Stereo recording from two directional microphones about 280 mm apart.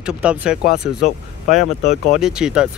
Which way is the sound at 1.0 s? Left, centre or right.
Left.